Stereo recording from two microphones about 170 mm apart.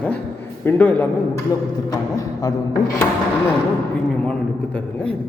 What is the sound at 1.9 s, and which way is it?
Speech, 20° left (ahead or behind).